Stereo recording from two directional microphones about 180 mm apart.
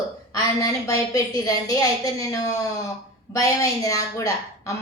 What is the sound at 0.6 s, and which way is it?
A woman's voice, 20° left (ahead or behind).